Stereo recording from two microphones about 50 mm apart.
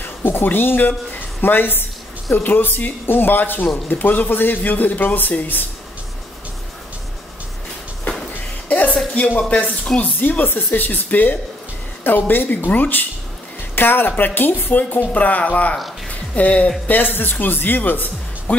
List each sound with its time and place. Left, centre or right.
0.0 s a sound: left
1.4 s speech: left
8.6 s music: left
9.2 s speech: left
16.8 s speech: left
18.5 s music: left